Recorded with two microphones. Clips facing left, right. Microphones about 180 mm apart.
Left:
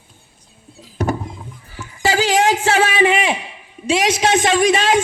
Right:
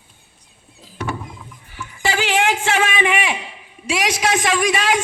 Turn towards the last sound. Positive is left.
turn(degrees=25)  # may be behind; listen again after turning